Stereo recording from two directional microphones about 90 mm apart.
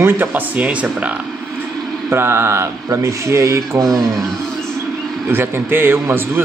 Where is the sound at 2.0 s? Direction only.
25° right (ahead or behind).